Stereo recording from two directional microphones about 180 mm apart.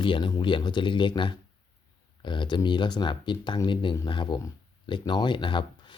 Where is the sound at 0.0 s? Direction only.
25° left (ahead or behind).